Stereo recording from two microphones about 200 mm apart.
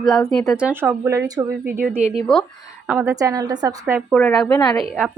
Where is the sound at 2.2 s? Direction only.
Centre (ahead or behind); by 4.0 s 15° right (ahead or behind).